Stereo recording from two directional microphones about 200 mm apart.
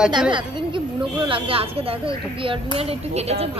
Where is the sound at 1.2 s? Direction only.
25° right (ahead or behind).